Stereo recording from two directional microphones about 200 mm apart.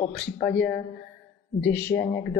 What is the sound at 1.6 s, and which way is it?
Speech, 10° left (ahead or behind).